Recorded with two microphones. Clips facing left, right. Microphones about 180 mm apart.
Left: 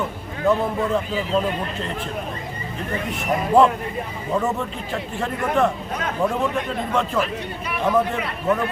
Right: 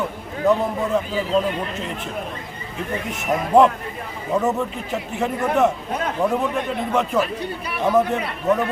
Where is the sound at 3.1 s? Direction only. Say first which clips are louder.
Right 1 dB; 20° right (ahead or behind).